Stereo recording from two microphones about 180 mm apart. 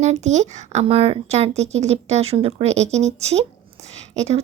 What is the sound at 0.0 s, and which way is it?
Speech, 40° right (ahead or behind).